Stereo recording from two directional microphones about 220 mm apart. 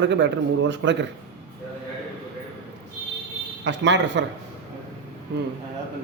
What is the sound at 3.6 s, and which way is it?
Speech, 55° right (ahead or behind).